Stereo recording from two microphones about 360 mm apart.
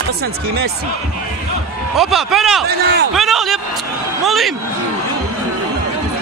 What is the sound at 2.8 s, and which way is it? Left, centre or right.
Speech, right.